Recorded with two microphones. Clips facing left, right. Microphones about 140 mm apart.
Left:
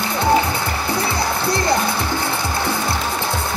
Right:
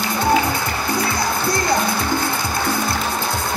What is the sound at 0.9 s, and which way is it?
Music, 25° left (ahead or behind).